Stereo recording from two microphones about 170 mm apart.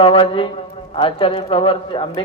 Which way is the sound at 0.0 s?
30° left (ahead or behind).